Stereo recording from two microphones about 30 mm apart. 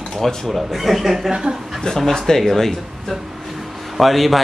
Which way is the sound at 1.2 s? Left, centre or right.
Right.